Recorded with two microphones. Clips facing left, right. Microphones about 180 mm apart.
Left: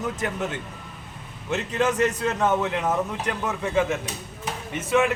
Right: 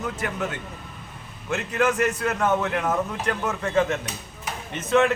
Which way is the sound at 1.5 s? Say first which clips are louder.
Even; 20° left (ahead or behind).